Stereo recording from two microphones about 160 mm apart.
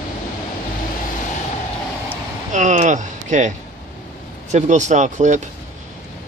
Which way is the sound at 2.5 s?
50° right (ahead or behind).